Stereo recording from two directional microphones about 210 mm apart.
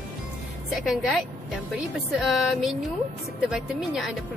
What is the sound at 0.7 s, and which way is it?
Speech, centre (ahead or behind).